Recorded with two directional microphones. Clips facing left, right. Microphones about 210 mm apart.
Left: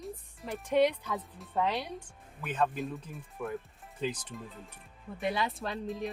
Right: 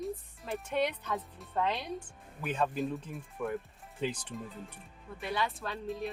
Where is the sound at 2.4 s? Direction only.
5° right (ahead or behind).